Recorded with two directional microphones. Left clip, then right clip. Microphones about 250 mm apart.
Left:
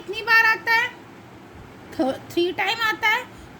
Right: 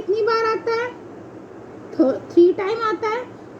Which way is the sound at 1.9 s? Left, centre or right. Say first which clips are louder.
Right 7 dB; left.